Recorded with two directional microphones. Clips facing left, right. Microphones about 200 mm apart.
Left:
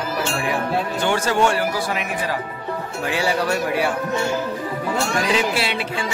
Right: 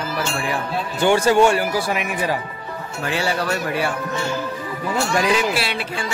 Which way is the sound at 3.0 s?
15° left (ahead or behind).